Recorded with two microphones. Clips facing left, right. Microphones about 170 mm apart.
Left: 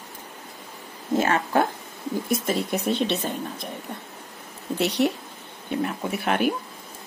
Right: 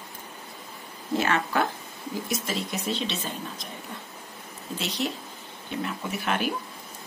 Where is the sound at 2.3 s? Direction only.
55° left (ahead or behind).